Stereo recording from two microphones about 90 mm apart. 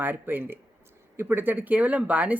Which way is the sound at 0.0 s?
20° right (ahead or behind).